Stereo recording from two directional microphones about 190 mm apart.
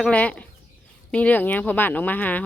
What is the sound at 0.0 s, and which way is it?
Speech, 5° left (ahead or behind).